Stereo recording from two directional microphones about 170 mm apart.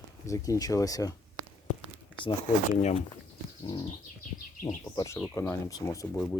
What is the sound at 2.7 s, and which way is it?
Speech, 40° left (ahead or behind).